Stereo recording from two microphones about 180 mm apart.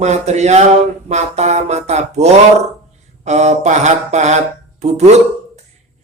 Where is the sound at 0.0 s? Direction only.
40° right (ahead or behind).